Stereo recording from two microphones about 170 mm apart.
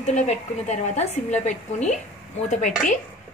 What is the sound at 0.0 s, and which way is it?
A woman's voice, 45° left (ahead or behind).